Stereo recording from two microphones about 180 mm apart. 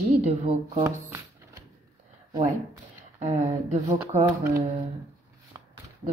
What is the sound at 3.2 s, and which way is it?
Speech, 40° right (ahead or behind).